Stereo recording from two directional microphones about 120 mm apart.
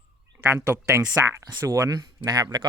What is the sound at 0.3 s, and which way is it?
Speech, 20° right (ahead or behind).